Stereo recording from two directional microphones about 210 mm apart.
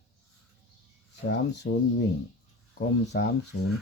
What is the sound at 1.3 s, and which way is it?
Speech, 55° left (ahead or behind).